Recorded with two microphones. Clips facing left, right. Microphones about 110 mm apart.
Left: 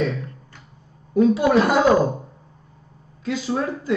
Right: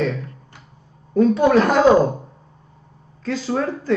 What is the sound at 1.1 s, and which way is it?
Speech, 10° left (ahead or behind).